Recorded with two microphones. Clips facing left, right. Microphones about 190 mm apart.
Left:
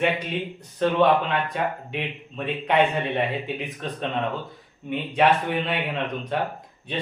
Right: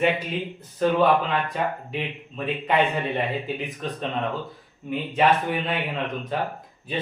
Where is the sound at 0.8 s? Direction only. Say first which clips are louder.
Even; centre (ahead or behind).